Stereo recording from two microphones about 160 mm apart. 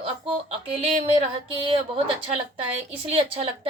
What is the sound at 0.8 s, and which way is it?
Speech, 35° right (ahead or behind).